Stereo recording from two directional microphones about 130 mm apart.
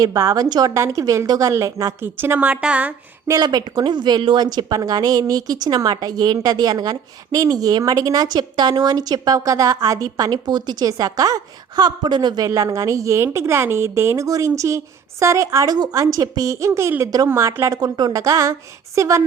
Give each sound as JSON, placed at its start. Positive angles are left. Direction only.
{"t": 0.0, "sound": "a woman's voice", "side_deg": -25}
{"t": 3.2, "sound": "a woman's voice", "side_deg": -30}